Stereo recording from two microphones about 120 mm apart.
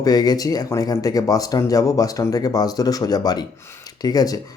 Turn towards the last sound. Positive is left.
turn(degrees=30)  # may be behind; listen again after turning